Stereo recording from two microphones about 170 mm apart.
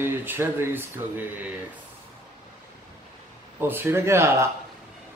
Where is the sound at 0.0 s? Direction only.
10° right (ahead or behind).